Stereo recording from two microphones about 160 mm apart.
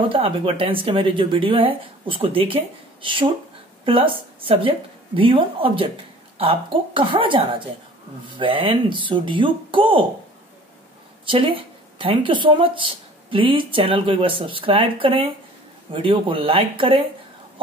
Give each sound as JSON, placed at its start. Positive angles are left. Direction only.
{"t": 0.1, "sound": "speech", "side_deg": -35}
{"t": 11.2, "sound": "speech", "side_deg": -35}